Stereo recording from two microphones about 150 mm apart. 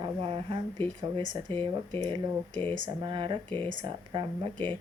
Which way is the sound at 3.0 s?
30° right (ahead or behind).